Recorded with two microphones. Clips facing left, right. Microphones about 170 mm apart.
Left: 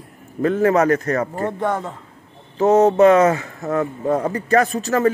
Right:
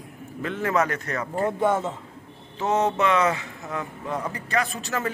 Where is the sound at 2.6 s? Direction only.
40° left (ahead or behind).